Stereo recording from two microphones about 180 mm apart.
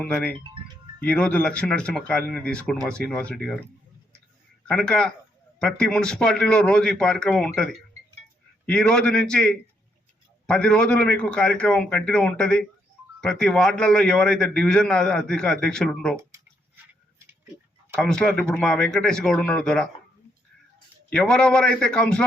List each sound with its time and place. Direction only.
0.0 s a man's voice: 10° left (ahead or behind)
4.7 s a man's voice: 5° left (ahead or behind)
17.9 s a man's voice: 5° left (ahead or behind)
21.1 s a man's voice: 5° left (ahead or behind)